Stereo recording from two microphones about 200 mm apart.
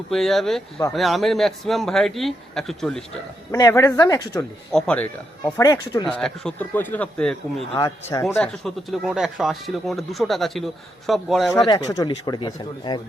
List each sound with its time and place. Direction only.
0.1 s a man's voice: centre (ahead or behind)
3.5 s speech: 15° left (ahead or behind)
4.7 s a man's voice: 5° left (ahead or behind)
6.1 s speech: 5° left (ahead or behind)
7.8 s speech: 15° left (ahead or behind)
8.6 s a man's voice: centre (ahead or behind)
11.6 s speech: 20° left (ahead or behind)